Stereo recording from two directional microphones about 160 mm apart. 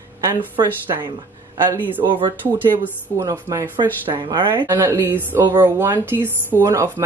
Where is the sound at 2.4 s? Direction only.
15° right (ahead or behind).